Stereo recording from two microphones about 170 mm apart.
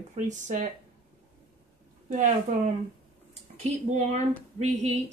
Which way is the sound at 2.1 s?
50° right (ahead or behind).